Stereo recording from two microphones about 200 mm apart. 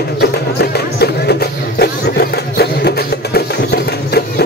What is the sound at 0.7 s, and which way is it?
Music, 55° left (ahead or behind).